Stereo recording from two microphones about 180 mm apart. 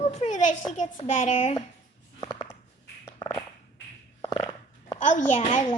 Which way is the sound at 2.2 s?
25° left (ahead or behind).